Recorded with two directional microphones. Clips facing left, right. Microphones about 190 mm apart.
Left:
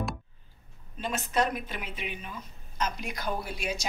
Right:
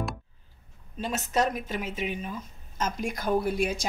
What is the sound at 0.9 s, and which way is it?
A woman's voice, 40° right (ahead or behind).